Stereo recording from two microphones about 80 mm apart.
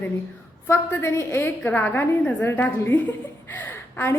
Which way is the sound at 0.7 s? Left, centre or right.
Left.